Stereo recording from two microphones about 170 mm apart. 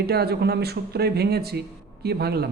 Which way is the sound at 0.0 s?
65° right (ahead or behind).